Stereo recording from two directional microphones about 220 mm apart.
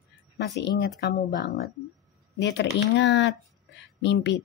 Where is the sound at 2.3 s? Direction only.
50° left (ahead or behind).